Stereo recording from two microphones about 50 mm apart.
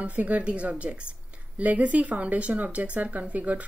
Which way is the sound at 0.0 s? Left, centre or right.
Right.